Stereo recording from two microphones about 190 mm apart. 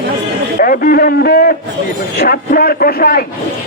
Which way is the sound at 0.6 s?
50° left (ahead or behind).